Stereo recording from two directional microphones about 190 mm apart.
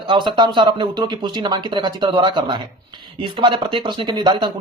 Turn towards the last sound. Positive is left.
turn(degrees=-25)  # may be behind; listen again after turning